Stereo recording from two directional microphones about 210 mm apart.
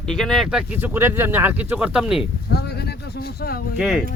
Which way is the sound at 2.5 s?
50° left (ahead or behind).